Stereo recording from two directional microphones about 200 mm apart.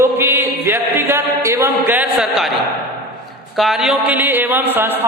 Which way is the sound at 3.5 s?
Centre (ahead or behind).